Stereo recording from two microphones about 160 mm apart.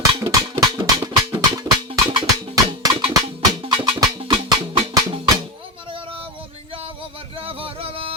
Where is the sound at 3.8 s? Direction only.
25° right (ahead or behind).